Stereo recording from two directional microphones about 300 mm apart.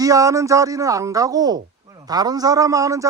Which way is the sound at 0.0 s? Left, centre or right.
Centre.